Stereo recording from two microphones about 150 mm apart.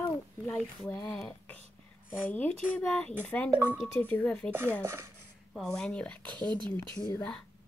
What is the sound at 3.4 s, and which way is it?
Speech, 15° right (ahead or behind).